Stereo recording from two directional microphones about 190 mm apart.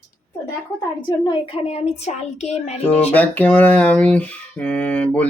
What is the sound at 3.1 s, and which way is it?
Speech, 10° left (ahead or behind).